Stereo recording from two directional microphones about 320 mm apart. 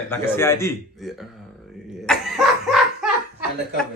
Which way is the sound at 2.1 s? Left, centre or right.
Centre.